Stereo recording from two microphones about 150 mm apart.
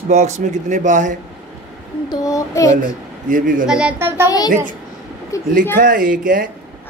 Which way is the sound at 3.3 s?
65° right (ahead or behind).